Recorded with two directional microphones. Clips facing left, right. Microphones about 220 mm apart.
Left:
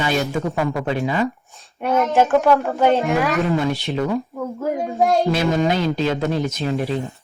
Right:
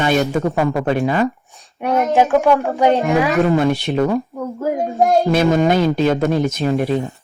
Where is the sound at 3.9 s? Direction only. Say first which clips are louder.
Right 4 dB; 50° right (ahead or behind).